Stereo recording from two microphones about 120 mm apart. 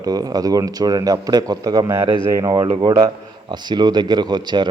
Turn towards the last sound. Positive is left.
turn(degrees=-40)  # may be behind; listen again after turning